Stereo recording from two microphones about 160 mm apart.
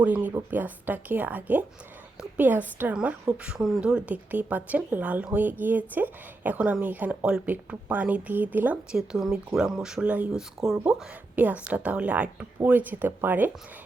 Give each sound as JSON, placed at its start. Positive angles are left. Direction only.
{"t": 0.0, "sound": "a woman's voice", "side_deg": -10}